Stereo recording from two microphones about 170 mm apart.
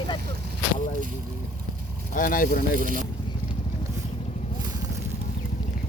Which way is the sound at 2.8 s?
50° right (ahead or behind).